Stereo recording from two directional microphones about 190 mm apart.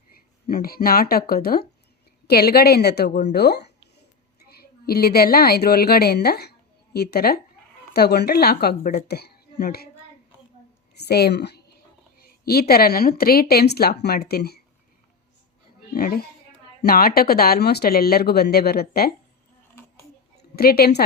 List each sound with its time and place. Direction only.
0.4 s a woman's voice: 55° left (ahead or behind)
10.9 s a woman's voice: 60° left (ahead or behind)
16.0 s speech: 50° left (ahead or behind)
20.6 s a woman's voice: 55° left (ahead or behind)